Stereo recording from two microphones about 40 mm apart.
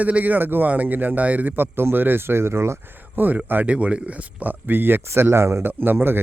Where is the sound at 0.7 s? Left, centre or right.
Right.